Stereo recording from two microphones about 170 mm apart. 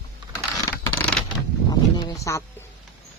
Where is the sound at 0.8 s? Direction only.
10° left (ahead or behind).